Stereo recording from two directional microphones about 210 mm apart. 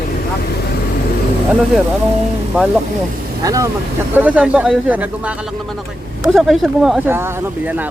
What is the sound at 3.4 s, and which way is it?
Speech, 15° right (ahead or behind).